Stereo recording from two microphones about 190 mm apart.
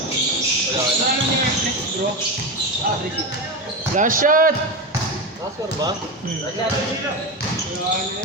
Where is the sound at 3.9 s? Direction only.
45° right (ahead or behind).